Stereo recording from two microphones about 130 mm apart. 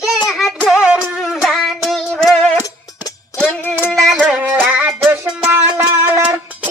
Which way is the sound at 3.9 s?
Centre (ahead or behind).